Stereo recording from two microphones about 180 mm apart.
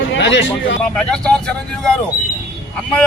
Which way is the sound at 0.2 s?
80° left.